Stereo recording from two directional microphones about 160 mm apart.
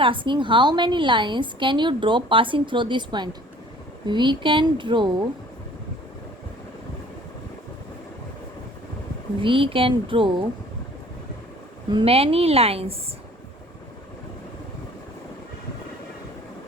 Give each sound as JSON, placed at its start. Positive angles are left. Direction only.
{"t": 0.0, "sound": "a woman's voice", "side_deg": -30}
{"t": 9.4, "sound": "a woman's voice", "side_deg": -35}
{"t": 11.9, "sound": "a woman's voice", "side_deg": -35}